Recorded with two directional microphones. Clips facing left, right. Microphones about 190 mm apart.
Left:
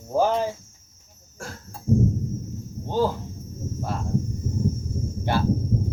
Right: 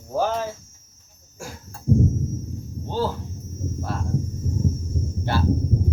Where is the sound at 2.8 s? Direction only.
15° left (ahead or behind).